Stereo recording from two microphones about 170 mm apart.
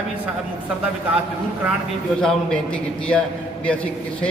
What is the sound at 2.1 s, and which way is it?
Speech, 5° left (ahead or behind).